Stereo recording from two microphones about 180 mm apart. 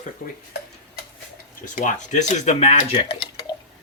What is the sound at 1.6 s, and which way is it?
Speech, 45° left (ahead or behind).